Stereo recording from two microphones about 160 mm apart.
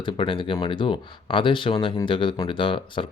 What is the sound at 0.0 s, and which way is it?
Speech, 30° left (ahead or behind).